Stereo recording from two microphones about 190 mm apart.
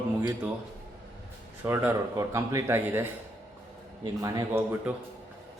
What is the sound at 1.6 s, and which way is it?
A man's voice, 10° right (ahead or behind).